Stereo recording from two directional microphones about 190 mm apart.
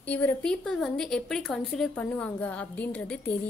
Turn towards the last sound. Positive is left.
turn(degrees=10)  # may be behind; listen again after turning